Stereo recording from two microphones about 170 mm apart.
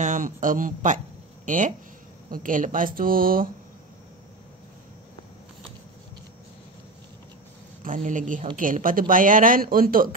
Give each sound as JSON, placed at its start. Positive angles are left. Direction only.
{"t": 0.0, "sound": "a woman's voice", "side_deg": -50}
{"t": 7.8, "sound": "speech", "side_deg": -50}